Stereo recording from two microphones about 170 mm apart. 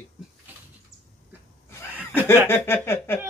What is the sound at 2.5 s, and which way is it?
Speech, 15° left (ahead or behind).